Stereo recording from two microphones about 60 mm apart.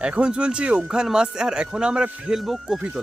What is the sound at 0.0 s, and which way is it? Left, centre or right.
Speech, centre.